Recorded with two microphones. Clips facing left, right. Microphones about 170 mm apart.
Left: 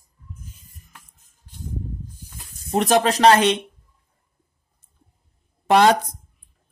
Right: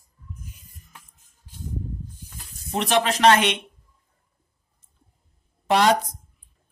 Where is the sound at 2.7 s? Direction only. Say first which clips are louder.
Left 4 dB; 45° left (ahead or behind).